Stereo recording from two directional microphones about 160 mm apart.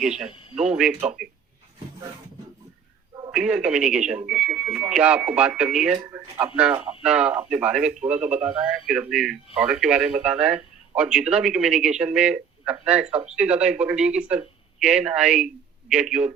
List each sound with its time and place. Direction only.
0.0 s a man's voice: centre (ahead or behind)
3.3 s a man's voice: 5° right (ahead or behind)
6.1 s a man's voice: 15° right (ahead or behind)